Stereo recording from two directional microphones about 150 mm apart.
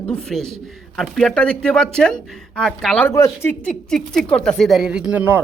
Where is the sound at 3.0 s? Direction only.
20° left (ahead or behind); by 5.4 s 10° right (ahead or behind).